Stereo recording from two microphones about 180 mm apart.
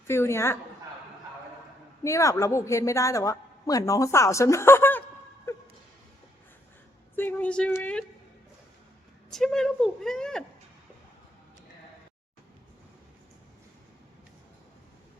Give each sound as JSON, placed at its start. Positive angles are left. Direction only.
{"t": 0.1, "sound": "a woman's voice", "side_deg": 15}
{"t": 2.0, "sound": "a woman's voice", "side_deg": 15}
{"t": 5.5, "sound": "music", "side_deg": 15}
{"t": 7.2, "sound": "a woman's voice", "side_deg": 10}
{"t": 9.3, "sound": "speech", "side_deg": 0}